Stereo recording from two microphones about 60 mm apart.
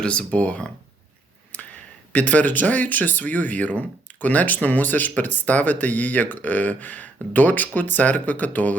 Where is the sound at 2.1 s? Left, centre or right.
Left.